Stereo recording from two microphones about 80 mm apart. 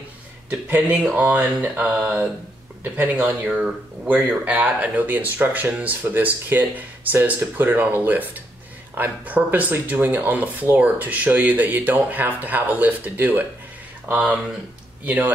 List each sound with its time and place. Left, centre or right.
0.5 s speech: right
1.9 s speech: centre
3.4 s speech: centre